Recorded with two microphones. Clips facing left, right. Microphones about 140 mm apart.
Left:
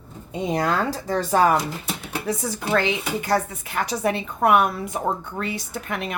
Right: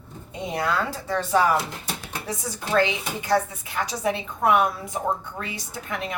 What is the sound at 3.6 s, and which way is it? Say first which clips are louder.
A woman's voice: left 2 dB; 60° left (ahead or behind).